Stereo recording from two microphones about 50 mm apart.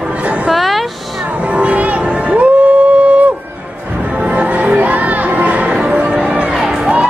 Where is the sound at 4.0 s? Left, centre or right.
Right.